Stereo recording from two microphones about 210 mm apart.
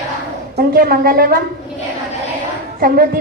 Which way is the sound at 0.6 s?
45° right (ahead or behind).